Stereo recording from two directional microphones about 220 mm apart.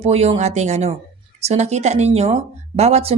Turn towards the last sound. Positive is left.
turn(degrees=-30)  # may be behind; listen again after turning